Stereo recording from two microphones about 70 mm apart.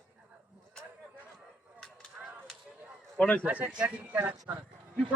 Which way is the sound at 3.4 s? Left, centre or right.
Right.